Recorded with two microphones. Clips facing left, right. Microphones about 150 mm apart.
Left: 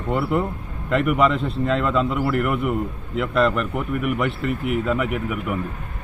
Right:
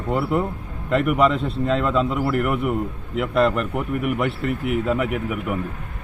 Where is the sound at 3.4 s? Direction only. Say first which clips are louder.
Even; 35° right (ahead or behind).